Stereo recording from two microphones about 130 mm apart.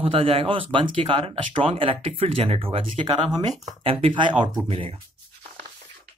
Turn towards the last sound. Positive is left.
turn(degrees=-45)  # may be behind; listen again after turning